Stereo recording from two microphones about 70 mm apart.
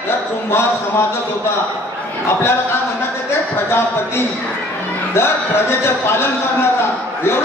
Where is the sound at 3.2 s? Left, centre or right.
Left.